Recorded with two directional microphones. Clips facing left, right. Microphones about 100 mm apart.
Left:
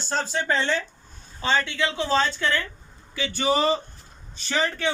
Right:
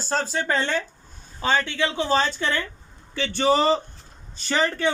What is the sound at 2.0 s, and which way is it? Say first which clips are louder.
Speech: right 1 dB; 20° right (ahead or behind).